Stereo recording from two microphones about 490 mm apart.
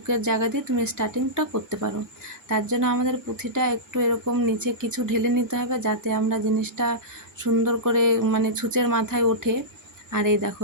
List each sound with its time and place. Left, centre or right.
0.1 s speech: right